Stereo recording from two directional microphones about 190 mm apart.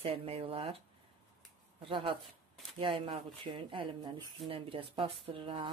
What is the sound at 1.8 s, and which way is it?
Speech, 30° right (ahead or behind).